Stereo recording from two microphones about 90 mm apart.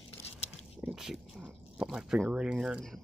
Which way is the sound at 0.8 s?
5° right (ahead or behind).